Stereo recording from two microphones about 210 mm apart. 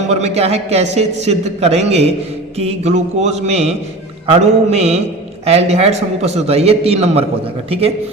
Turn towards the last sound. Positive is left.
turn(degrees=-25)  # may be behind; listen again after turning